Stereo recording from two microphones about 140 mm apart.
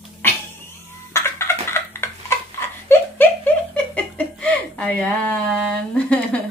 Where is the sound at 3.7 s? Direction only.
10° left (ahead or behind).